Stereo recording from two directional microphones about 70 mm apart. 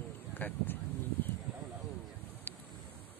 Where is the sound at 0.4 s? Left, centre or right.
Left.